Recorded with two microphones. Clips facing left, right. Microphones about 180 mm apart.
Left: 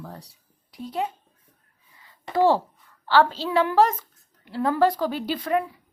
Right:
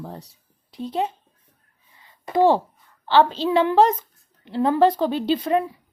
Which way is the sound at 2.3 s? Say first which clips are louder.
Right 2 dB; 15° right (ahead or behind).